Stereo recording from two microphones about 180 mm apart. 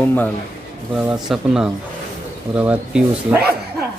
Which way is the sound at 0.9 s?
5° right (ahead or behind).